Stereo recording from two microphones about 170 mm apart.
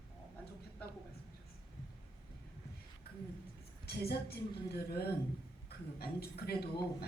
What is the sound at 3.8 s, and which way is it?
Speech, 70° left (ahead or behind).